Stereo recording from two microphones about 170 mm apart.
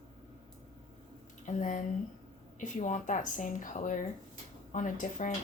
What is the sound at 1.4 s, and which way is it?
A woman's voice, 50° left (ahead or behind).